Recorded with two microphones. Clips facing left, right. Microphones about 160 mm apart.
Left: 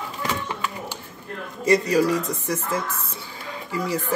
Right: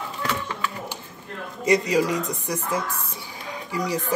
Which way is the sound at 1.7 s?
15° right (ahead or behind).